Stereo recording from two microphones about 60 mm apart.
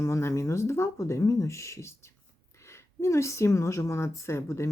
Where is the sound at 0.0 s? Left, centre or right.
Left.